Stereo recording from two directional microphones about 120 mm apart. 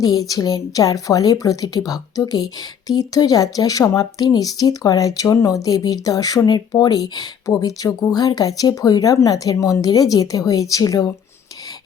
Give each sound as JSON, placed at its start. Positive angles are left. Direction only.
{"t": 0.0, "sound": "speech", "side_deg": 30}